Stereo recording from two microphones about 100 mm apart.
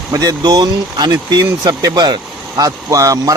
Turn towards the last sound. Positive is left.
turn(degrees=-35)  # may be behind; listen again after turning